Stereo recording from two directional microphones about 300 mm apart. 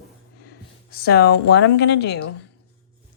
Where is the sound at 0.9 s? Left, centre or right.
Left.